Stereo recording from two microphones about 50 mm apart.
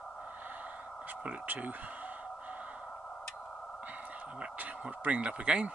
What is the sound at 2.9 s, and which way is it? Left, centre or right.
Tick, centre.